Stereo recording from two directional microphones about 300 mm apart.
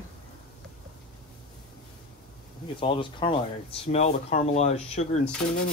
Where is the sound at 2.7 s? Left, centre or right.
Centre.